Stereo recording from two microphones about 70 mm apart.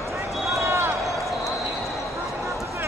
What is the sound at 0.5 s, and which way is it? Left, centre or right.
Run, right.